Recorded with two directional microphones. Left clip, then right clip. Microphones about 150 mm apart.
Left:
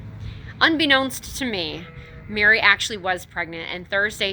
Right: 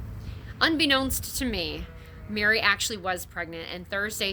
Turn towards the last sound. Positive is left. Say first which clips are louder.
# left 7 dB
turn(degrees=-20)  # may be behind; listen again after turning